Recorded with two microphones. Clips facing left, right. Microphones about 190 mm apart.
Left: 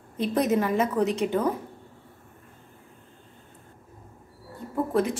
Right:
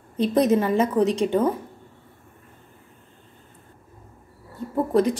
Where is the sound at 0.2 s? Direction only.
30° right (ahead or behind).